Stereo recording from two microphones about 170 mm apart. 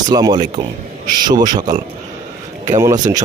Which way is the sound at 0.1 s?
25° right (ahead or behind).